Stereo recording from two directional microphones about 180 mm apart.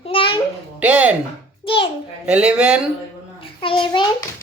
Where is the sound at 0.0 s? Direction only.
30° left (ahead or behind).